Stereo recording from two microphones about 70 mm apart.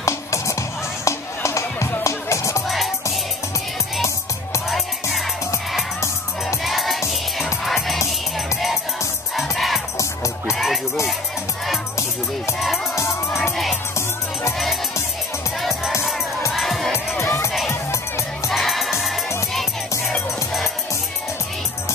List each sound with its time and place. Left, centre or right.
0.0 s music: left
4.6 s music: centre
6.4 s music: centre
9.3 s crowd: centre
10.5 s music: centre
12.5 s music: centre
16.5 s music: centre
17.2 s music: left
18.5 s music: centre